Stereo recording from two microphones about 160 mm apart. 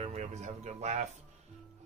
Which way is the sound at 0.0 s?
45° right (ahead or behind).